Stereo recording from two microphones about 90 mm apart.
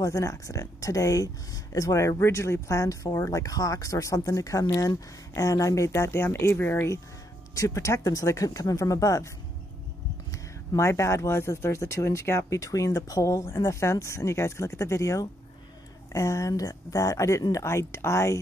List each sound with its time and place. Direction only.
0.0 s speech: 35° left (ahead or behind)
10.3 s speech: 35° left (ahead or behind)